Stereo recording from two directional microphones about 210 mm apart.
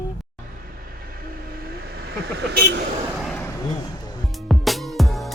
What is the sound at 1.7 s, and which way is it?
Vehicle, 50° right (ahead or behind).